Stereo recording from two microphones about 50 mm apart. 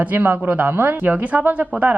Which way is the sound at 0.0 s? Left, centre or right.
Right.